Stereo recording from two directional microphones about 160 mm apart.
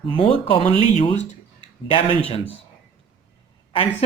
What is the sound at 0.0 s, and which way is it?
Speech, 35° left (ahead or behind).